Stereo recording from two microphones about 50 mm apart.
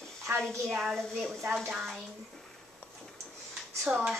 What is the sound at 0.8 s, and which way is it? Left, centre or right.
Speech, centre.